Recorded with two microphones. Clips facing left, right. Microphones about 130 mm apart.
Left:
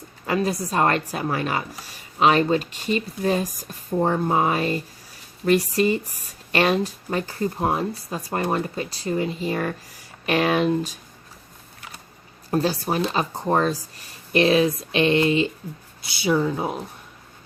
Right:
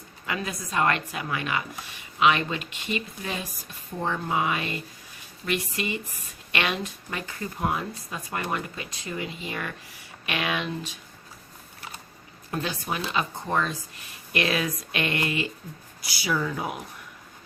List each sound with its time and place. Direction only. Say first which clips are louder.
0.3 s speech: left 9 dB; 35° left (ahead or behind)
12.5 s speech: left 8 dB; 35° left (ahead or behind)